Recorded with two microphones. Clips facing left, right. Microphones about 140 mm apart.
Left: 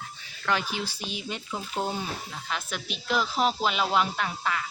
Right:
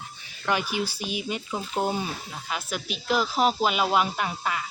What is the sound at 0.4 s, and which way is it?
Speech, 10° right (ahead or behind).